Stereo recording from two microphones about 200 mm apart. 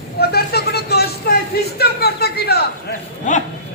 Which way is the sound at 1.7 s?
55° left (ahead or behind).